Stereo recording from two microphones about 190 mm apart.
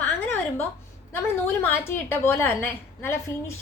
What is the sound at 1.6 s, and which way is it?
A woman's voice, 10° left (ahead or behind).